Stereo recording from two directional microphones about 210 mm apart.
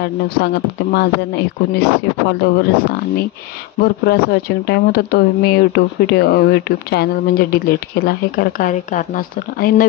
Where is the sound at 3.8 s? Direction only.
50° left (ahead or behind).